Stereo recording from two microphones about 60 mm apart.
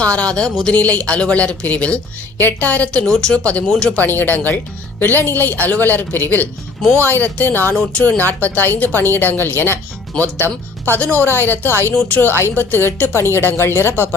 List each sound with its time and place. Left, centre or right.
0.0 s speech: centre
0.7 s speech: left
4.0 s speech: left
12.0 s speech: left
13.1 s speech: left